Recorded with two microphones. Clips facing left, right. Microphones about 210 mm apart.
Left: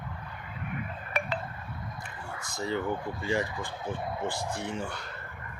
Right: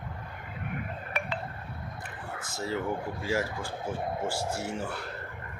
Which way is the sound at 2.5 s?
5° right (ahead or behind).